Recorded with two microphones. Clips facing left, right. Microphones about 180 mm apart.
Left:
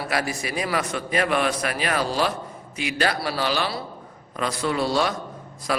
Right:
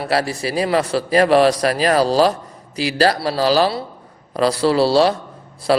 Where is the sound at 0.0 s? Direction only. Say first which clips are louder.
Right 6 dB; 30° right (ahead or behind).